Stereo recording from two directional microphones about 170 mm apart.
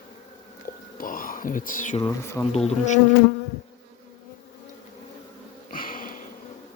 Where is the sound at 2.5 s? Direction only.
40° left (ahead or behind).